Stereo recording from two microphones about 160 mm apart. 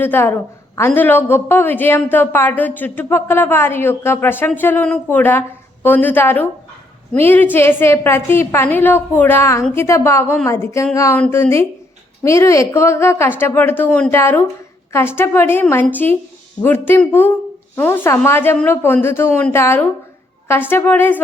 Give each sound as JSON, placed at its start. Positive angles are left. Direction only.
{"t": 0.0, "sound": "a woman's voice", "side_deg": 15}